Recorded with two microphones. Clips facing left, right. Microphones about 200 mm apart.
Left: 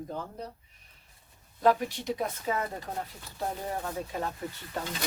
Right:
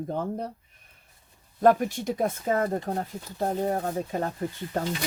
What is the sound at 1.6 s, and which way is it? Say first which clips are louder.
Speech: right 5 dB; 50° right (ahead or behind).